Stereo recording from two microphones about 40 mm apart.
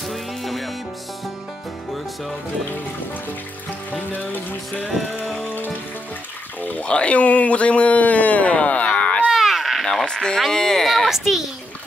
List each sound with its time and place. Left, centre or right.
0.1 s music: centre
3.9 s music: left
6.8 s speech: left
9.3 s a sound: centre
10.0 s speech: centre
11.1 s a child's voice: centre